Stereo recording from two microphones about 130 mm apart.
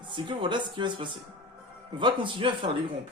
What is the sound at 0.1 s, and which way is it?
Mantra, 40° right (ahead or behind).